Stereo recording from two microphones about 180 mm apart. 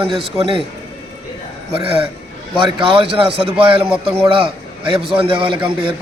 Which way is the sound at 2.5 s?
30° right (ahead or behind).